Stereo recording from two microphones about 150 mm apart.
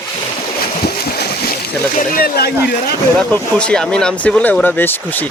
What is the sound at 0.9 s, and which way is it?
Splash, 90° left.